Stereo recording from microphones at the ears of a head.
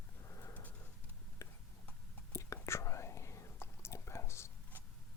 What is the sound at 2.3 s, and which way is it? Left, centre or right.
Whispering, left.